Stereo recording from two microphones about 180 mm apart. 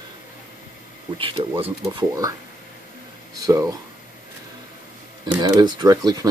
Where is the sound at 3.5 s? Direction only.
20° right (ahead or behind).